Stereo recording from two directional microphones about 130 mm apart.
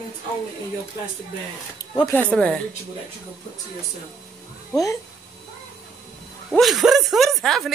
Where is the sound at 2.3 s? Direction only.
5° left (ahead or behind).